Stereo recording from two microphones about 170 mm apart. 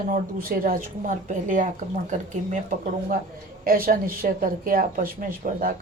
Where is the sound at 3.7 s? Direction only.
60° right (ahead or behind).